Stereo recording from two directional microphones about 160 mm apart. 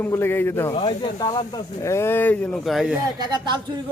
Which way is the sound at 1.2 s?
25° left (ahead or behind).